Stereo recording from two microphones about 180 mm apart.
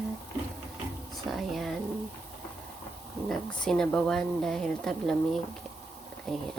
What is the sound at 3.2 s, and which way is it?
A woman's voice, 5° left (ahead or behind).